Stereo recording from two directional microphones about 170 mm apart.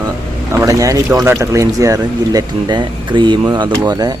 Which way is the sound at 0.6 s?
20° right (ahead or behind).